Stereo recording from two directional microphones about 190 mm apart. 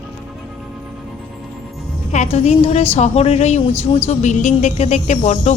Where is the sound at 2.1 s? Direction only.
35° left (ahead or behind).